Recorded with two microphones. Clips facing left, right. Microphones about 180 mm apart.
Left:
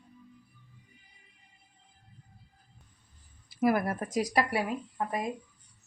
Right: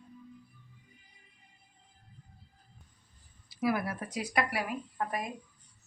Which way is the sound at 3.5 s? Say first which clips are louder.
Left 4 dB; 50° left (ahead or behind).